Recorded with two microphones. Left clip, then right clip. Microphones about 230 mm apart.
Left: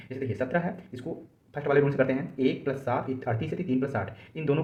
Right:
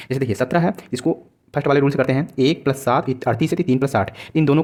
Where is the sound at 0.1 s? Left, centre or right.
Right.